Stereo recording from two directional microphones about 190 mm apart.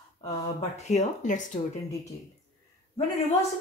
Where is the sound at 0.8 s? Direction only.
40° left (ahead or behind).